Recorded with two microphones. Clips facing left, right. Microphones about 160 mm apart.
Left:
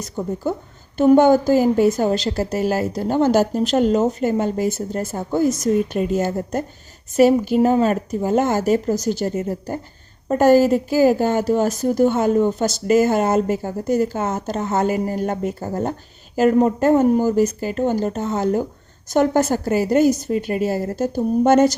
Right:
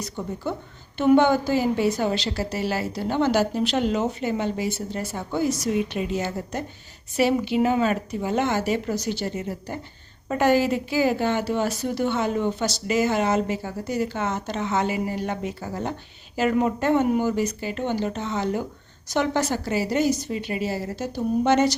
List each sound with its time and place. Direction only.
0.2 s a woman's voice: 40° left (ahead or behind)